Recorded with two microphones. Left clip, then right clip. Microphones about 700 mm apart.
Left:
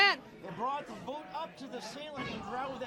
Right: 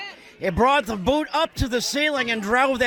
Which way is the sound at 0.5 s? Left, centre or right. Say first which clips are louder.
Right 17 dB; right.